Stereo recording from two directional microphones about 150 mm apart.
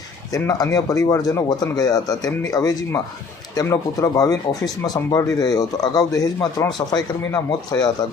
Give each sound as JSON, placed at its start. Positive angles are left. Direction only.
{"t": 0.3, "sound": "a man's voice", "side_deg": 25}